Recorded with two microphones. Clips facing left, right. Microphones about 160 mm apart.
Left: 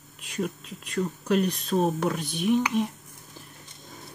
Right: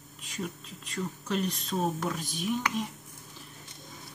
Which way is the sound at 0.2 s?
65° left (ahead or behind).